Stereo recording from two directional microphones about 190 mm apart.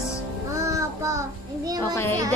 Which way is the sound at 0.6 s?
15° right (ahead or behind).